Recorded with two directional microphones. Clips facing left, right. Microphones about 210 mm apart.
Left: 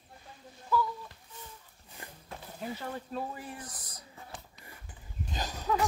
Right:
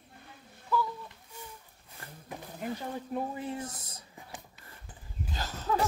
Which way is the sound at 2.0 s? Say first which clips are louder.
Left 1 dB; 15° left (ahead or behind).